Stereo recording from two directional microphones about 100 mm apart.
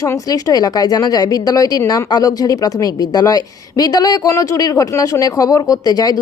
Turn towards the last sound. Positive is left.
turn(degrees=40)  # may be behind; listen again after turning